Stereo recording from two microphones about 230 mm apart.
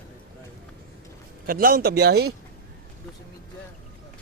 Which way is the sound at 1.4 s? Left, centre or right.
Right.